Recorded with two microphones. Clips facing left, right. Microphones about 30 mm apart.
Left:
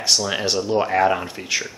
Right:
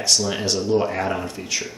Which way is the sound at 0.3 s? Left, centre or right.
Left.